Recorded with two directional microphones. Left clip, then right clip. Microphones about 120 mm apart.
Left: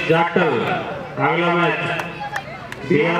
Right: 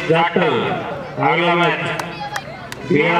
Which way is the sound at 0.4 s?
35° left (ahead or behind).